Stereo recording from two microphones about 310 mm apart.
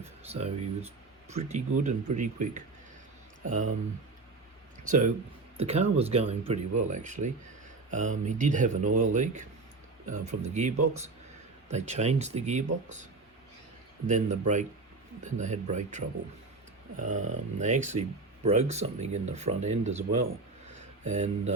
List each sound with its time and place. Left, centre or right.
0.0 s speech: right
4.8 s speech: right
14.1 s speech: right
20.7 s a sound: right